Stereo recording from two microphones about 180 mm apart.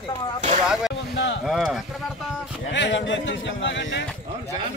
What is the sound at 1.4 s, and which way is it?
Speech, centre (ahead or behind).